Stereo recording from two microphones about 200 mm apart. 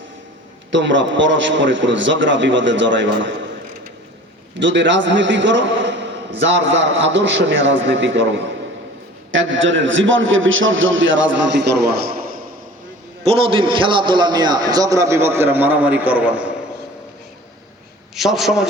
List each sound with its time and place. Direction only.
0.7 s a man's voice: 65° right (ahead or behind)
4.6 s a man's voice: 65° right (ahead or behind)
13.2 s a man's voice: 30° right (ahead or behind); by 16.5 s 5° right (ahead or behind)
18.1 s a man's voice: centre (ahead or behind)